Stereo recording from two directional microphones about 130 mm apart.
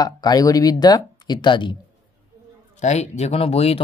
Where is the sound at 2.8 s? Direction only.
60° left (ahead or behind).